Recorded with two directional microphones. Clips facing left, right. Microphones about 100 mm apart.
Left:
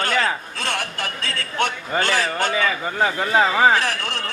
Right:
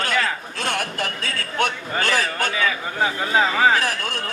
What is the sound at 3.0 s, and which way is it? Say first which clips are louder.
Speech: left 2 dB; centre (ahead or behind).